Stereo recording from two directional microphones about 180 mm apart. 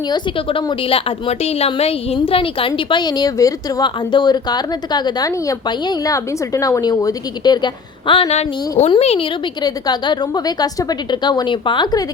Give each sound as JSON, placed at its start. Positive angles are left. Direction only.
{"t": 0.1, "sound": "a woman's voice", "side_deg": 30}
{"t": 9.6, "sound": "a woman's voice", "side_deg": 20}